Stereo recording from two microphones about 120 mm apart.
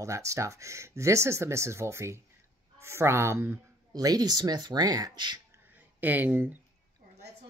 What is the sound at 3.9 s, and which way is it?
Speech, 35° right (ahead or behind).